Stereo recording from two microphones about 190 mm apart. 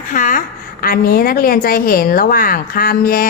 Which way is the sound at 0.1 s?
45° left (ahead or behind).